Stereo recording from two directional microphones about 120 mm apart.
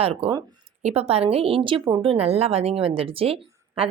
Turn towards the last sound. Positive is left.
turn(degrees=-50)  # may be behind; listen again after turning